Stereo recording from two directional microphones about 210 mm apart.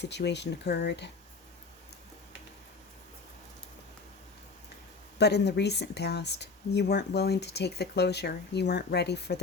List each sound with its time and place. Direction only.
0.0 s speech: 55° left (ahead or behind)
5.1 s speech: 55° left (ahead or behind)